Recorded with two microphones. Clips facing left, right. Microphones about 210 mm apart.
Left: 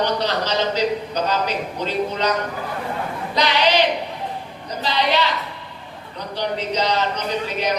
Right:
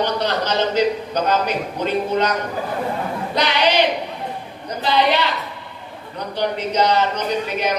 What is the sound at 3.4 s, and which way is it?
Speech, 55° right (ahead or behind).